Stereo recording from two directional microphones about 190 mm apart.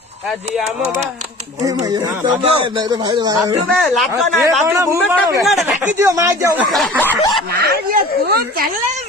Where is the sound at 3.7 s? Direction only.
Centre (ahead or behind).